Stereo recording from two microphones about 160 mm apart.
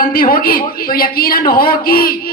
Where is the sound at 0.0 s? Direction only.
65° left (ahead or behind).